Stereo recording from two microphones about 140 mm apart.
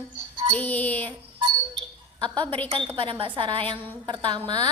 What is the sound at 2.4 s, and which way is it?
A woman's voice, 40° right (ahead or behind).